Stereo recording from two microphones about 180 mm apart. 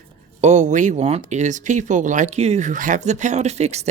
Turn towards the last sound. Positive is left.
turn(degrees=-40)  # may be behind; listen again after turning